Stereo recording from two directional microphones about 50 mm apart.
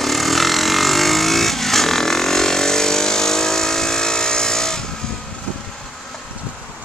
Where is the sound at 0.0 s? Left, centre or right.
Centre.